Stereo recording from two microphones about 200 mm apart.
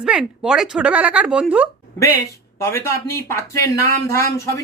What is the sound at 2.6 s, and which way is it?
Speech, 15° left (ahead or behind).